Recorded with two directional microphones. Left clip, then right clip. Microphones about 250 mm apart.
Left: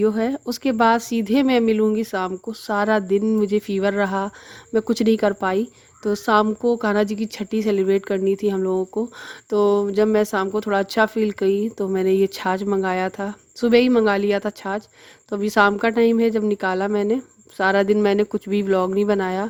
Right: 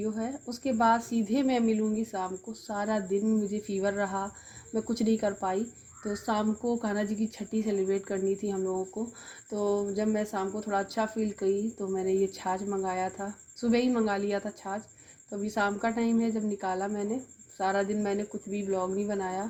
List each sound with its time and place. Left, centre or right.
0.0 s speech: left
9.5 s a sound: left
9.9 s speech: left